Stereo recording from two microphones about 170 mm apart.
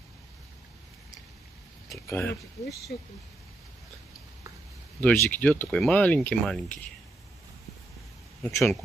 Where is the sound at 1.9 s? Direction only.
15° left (ahead or behind).